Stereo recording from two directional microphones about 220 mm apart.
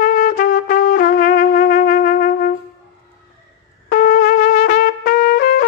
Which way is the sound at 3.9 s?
40° left (ahead or behind).